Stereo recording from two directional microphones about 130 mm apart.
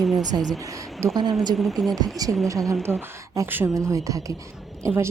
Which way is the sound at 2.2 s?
30° right (ahead or behind).